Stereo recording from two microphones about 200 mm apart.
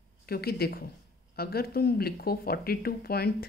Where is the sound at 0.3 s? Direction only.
50° left (ahead or behind).